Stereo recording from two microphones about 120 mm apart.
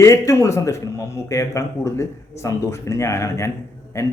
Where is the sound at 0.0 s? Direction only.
25° left (ahead or behind).